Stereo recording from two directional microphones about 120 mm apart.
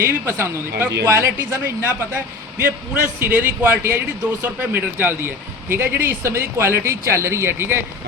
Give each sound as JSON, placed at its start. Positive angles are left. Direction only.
{"t": 0.0, "sound": "a man's voice", "side_deg": -20}